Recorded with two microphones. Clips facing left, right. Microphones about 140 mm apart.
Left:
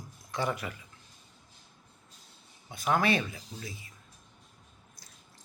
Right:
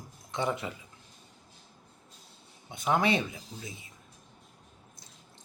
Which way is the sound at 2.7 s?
20° right (ahead or behind).